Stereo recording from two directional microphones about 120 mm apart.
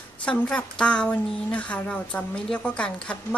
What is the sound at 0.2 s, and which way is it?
A woman's voice, 10° left (ahead or behind).